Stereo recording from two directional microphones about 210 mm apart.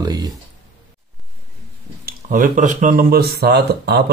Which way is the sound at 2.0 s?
35° right (ahead or behind).